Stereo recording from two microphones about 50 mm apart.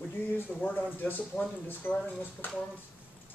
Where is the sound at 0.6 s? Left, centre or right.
Left.